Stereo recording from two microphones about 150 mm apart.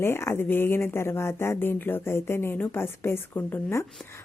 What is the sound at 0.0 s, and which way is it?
A woman's voice, 15° left (ahead or behind).